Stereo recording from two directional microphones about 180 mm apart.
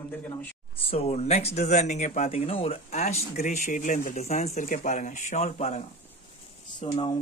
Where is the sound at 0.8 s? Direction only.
35° left (ahead or behind).